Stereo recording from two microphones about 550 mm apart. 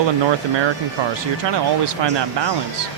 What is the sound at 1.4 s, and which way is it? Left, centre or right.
Speech, right.